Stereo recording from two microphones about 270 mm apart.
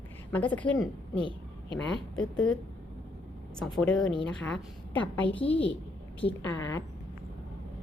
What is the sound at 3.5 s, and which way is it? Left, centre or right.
A woman's voice, centre.